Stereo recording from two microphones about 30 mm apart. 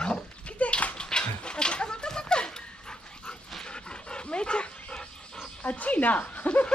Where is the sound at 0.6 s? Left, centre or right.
Left.